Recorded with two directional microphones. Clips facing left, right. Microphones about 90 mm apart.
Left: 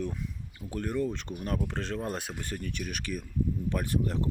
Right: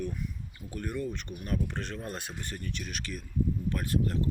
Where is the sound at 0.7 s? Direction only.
90° left.